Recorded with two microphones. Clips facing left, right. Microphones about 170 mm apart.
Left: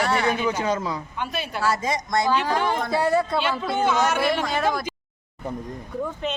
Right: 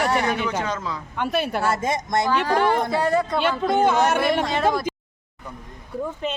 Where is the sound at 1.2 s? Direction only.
55° right (ahead or behind).